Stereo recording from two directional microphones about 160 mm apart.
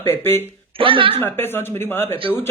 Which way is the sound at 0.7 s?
35° right (ahead or behind).